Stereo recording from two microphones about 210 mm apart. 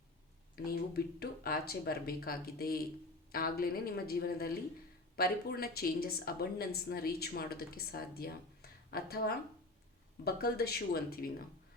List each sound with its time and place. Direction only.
0.5 s speech: 45° left (ahead or behind)